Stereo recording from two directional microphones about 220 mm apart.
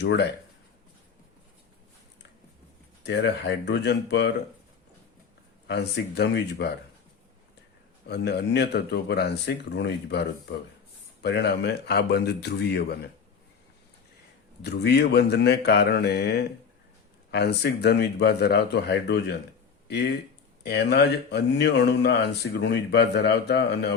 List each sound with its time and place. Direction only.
0.0 s speech: 50° left (ahead or behind)
3.0 s speech: 50° left (ahead or behind)
5.6 s speech: 50° left (ahead or behind)
8.0 s speech: 50° left (ahead or behind)
14.6 s speech: 50° left (ahead or behind)
20.7 s speech: 50° left (ahead or behind)